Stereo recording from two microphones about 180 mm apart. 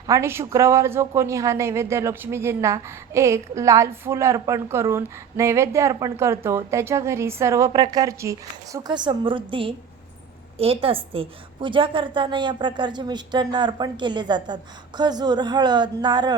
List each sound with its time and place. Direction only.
0.1 s a woman's voice: 15° right (ahead or behind)